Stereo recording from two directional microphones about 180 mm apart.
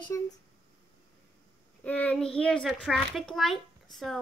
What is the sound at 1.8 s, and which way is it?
A child's voice, 10° left (ahead or behind).